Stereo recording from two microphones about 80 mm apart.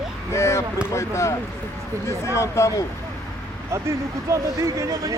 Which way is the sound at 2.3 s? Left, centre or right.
Left.